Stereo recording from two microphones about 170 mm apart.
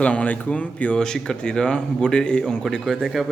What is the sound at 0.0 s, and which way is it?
Speech, 5° left (ahead or behind).